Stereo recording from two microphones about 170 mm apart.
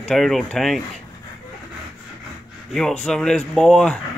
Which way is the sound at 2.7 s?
5° left (ahead or behind).